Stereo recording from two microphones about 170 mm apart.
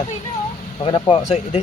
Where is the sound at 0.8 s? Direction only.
30° left (ahead or behind).